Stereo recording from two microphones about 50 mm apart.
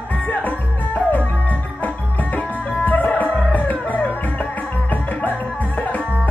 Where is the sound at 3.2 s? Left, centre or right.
Right.